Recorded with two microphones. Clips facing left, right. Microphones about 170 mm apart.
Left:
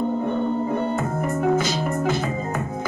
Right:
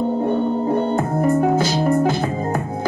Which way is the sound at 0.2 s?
35° right (ahead or behind).